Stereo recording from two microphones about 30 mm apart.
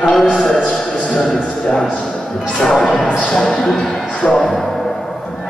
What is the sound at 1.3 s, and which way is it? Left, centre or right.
Speech, left.